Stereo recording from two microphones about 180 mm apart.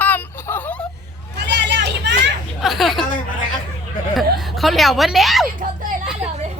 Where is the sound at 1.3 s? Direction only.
75° right (ahead or behind).